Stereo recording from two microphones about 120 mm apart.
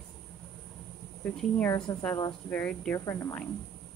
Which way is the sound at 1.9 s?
30° left (ahead or behind).